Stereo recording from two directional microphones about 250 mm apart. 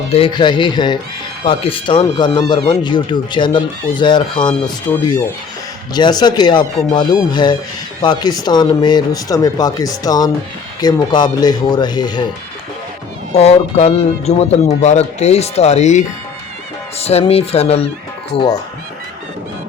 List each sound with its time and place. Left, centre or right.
0.1 s speech: centre
4.9 s speech: centre
13.3 s speech: left